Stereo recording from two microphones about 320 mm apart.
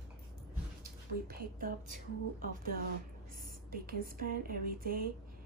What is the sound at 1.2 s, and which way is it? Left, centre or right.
Speech, right.